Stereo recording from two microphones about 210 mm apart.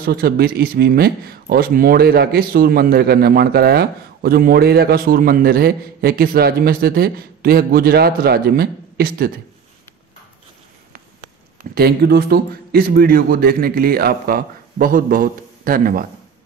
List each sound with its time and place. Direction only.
0.0 s a man's voice: 45° right (ahead or behind)
11.7 s a man's voice: 50° right (ahead or behind)